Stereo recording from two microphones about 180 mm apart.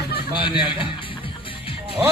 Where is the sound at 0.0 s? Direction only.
60° left (ahead or behind).